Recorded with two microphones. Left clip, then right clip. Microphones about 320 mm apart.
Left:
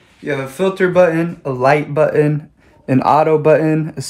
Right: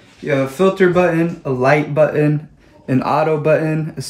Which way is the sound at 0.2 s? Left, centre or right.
Centre.